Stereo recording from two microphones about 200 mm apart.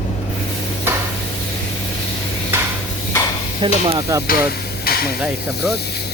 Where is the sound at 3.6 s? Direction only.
20° right (ahead or behind).